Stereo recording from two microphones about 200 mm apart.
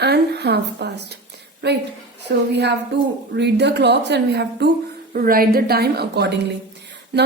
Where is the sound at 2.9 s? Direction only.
60° right (ahead or behind).